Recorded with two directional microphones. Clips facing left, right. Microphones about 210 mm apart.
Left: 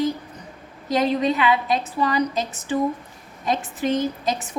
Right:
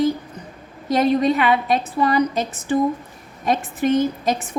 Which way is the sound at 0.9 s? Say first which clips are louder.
Right 3 dB; 50° right (ahead or behind).